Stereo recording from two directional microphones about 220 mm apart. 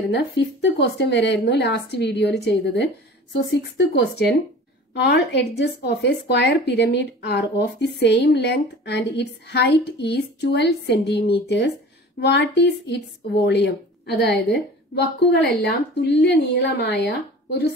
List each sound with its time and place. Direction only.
0.4 s speech: 50° left (ahead or behind)